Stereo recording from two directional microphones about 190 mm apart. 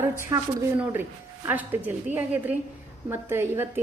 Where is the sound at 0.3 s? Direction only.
20° right (ahead or behind).